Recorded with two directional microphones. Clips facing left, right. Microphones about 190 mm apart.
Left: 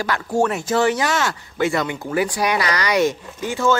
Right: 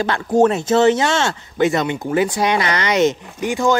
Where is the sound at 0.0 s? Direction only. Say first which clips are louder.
Right 5 dB; 25° right (ahead or behind).